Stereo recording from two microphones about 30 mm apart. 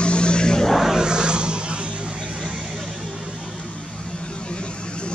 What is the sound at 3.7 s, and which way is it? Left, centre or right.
Vehicle, left.